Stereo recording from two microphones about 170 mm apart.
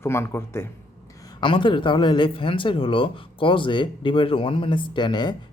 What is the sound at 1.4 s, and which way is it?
Speech, 30° left (ahead or behind).